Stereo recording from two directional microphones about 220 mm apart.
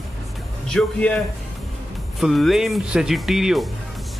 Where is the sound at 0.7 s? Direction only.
5° left (ahead or behind).